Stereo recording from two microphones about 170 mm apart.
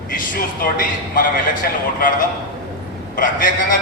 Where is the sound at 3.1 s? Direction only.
55° left (ahead or behind).